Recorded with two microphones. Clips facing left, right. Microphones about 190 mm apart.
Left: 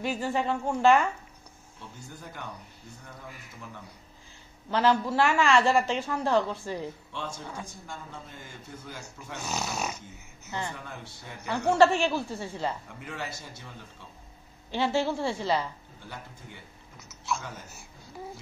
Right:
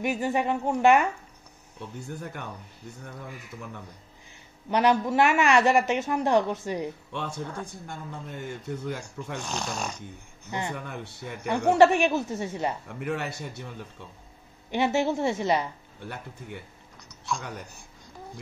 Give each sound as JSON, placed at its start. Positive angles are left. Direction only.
{"t": 0.0, "sound": "a woman's voice", "side_deg": -15}
{"t": 2.0, "sound": "speech", "side_deg": -60}
{"t": 4.6, "sound": "a woman's voice", "side_deg": -15}
{"t": 7.1, "sound": "speech", "side_deg": -60}
{"t": 9.4, "sound": "speech", "side_deg": 5}
{"t": 10.7, "sound": "speech", "side_deg": -60}
{"t": 11.7, "sound": "a woman's voice", "side_deg": -15}
{"t": 12.8, "sound": "speech", "side_deg": -65}
{"t": 14.7, "sound": "a woman's voice", "side_deg": -20}
{"t": 16.0, "sound": "speech", "side_deg": -55}